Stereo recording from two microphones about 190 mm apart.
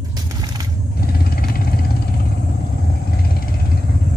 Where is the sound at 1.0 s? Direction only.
50° left (ahead or behind).